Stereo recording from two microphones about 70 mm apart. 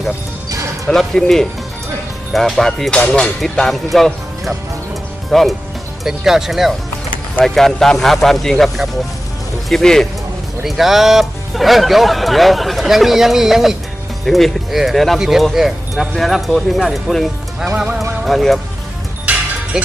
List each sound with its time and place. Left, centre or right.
0.9 s music: centre
2.3 s speech: centre
2.9 s music: centre
3.9 s speech: centre
17.7 s speech: centre
18.3 s speech: centre
19.3 s music: right
19.7 s speech: centre